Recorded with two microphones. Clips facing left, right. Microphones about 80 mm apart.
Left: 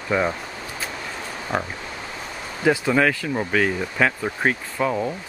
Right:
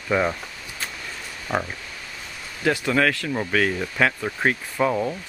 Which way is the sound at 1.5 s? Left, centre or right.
Left.